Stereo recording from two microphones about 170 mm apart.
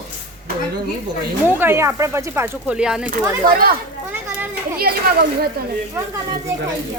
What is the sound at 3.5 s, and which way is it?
Speech, 60° right (ahead or behind).